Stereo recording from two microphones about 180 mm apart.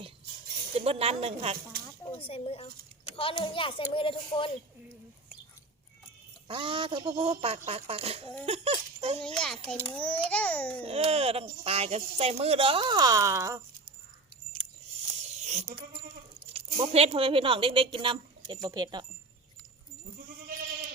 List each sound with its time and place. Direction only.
0.8 s speech: 35° right (ahead or behind)
2.0 s a child's voice: 30° left (ahead or behind)
6.5 s speech: 30° right (ahead or behind)
8.4 s a sound: 35° right (ahead or behind)
9.4 s a child's voice: 5° left (ahead or behind)
10.8 s speech: 35° right (ahead or behind); by 13.9 s 15° right (ahead or behind)
14.6 s a sound: 30° right (ahead or behind)
16.5 s speech: 35° right (ahead or behind)